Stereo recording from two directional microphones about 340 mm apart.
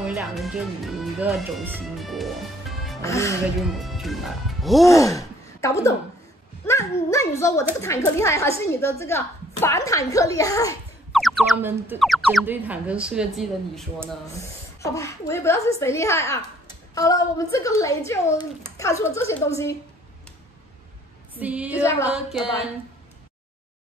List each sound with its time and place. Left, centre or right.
0.0 s a woman's voice: centre
21.4 s speech: centre
21.8 s a woman's voice: centre